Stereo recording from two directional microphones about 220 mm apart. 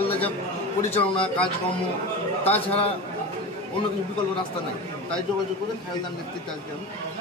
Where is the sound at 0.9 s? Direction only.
25° left (ahead or behind).